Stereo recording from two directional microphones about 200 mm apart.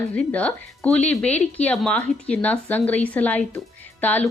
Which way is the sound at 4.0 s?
10° left (ahead or behind).